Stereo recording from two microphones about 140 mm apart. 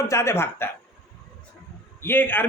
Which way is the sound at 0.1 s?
20° left (ahead or behind).